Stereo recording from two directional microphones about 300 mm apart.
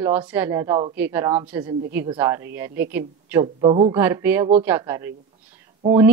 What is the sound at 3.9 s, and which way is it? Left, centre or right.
Speech, centre.